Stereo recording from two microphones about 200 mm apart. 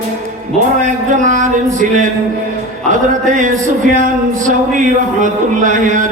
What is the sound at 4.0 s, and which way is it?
Speech, 40° right (ahead or behind).